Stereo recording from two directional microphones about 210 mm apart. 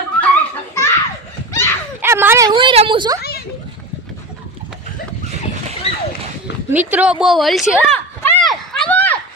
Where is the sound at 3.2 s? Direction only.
45° left (ahead or behind).